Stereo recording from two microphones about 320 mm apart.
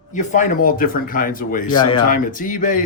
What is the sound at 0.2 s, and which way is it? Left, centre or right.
Speech, left.